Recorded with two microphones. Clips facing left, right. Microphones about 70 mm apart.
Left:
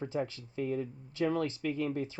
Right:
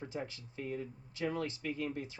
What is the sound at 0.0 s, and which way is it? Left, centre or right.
Speech, left.